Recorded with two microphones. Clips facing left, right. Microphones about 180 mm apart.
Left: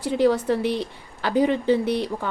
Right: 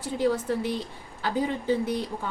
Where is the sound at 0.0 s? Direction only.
75° left (ahead or behind).